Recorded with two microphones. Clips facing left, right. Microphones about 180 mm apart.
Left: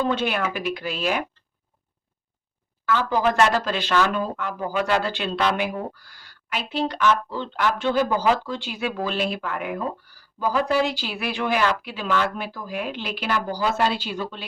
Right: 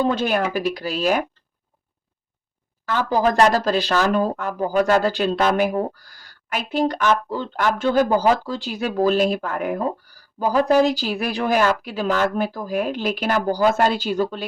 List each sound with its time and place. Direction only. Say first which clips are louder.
0.0 s speech: right 3 dB; 40° right (ahead or behind)
2.8 s speech: right 2 dB; 40° right (ahead or behind)